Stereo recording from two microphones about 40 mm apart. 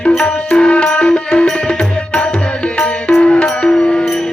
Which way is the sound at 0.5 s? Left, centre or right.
Left.